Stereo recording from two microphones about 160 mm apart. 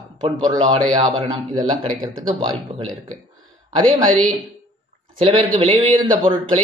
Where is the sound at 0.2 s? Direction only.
30° right (ahead or behind).